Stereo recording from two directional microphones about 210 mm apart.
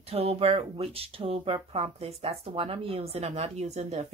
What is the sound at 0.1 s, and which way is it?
Speech, 30° right (ahead or behind).